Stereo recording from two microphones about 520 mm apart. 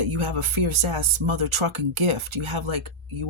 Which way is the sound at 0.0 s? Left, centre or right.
Right.